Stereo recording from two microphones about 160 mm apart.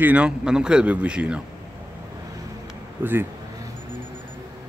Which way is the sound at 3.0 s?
15° right (ahead or behind).